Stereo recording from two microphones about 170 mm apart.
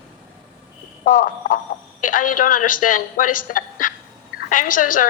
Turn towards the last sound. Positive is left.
turn(degrees=55)  # may be behind; listen again after turning